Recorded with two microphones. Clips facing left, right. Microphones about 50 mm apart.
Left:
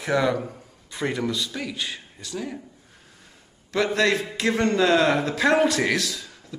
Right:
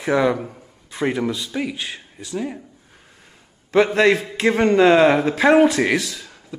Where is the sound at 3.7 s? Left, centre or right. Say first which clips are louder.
Right 6 dB; right.